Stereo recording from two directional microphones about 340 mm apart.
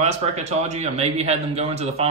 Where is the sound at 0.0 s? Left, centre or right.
Centre.